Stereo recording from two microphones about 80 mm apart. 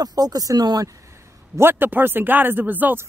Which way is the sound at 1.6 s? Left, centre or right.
Right.